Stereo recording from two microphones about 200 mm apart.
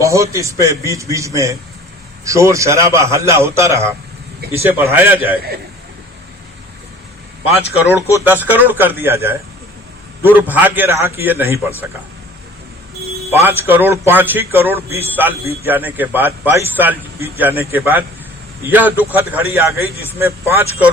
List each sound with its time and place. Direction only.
0.0 s a man's voice: 15° right (ahead or behind)
8.2 s a man's voice: 10° right (ahead or behind)
13.3 s a man's voice: 10° right (ahead or behind)